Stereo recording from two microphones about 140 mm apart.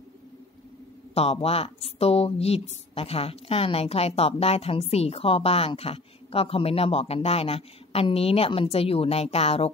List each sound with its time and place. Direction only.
1.1 s speech: 45° left (ahead or behind)